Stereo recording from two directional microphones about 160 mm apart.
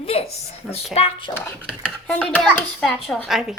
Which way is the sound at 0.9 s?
35° left (ahead or behind).